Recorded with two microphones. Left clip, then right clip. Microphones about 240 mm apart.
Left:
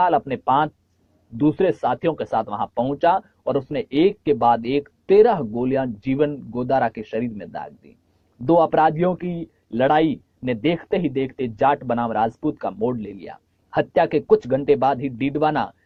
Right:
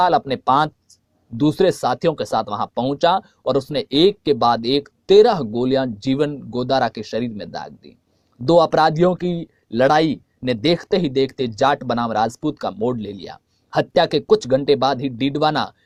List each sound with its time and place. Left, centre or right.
0.0 s speech: right
8.4 s a man's voice: right
8.7 s speech: right